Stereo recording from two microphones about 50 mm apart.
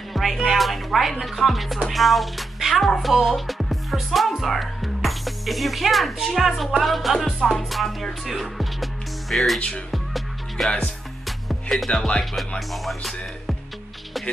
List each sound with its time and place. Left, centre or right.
0.1 s music: centre
7.7 s speech: centre
9.6 s speech: centre
9.8 s music: centre